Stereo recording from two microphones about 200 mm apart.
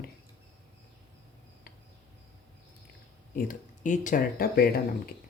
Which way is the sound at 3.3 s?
45° left (ahead or behind).